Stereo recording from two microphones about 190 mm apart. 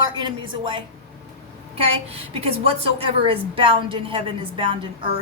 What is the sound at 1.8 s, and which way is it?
A woman's voice, 30° right (ahead or behind).